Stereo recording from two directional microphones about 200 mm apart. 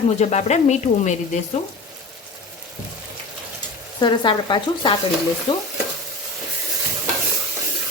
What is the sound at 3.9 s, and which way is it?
Stir, 20° left (ahead or behind).